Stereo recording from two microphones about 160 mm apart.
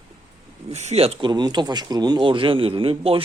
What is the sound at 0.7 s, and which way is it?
Speech, 40° right (ahead or behind).